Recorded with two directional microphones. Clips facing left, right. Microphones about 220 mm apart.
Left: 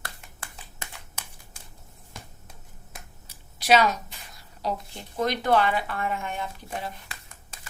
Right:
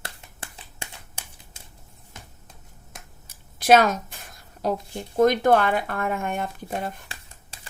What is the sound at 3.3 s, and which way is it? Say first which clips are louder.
A woman's voice: right 5 dB; 50° right (ahead or behind).